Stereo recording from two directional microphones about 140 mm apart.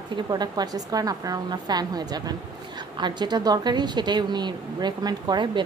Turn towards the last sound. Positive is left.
turn(degrees=-30)  # may be behind; listen again after turning